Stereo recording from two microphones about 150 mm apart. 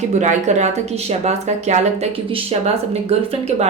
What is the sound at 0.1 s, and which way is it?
Speech, 50° right (ahead or behind).